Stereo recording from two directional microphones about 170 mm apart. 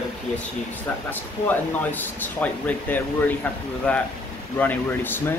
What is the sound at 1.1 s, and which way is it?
Speech, 10° left (ahead or behind).